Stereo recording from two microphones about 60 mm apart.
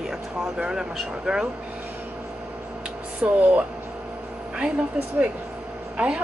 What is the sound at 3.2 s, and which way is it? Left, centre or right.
Speech, centre.